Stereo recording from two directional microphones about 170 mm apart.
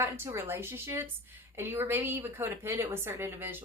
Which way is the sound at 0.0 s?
15° right (ahead or behind).